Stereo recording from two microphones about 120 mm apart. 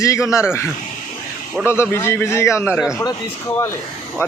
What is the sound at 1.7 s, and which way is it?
Speech, 20° left (ahead or behind).